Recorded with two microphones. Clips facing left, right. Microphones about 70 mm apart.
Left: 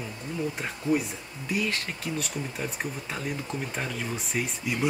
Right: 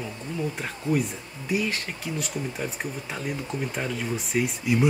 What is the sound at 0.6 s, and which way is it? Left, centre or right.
Speech, centre.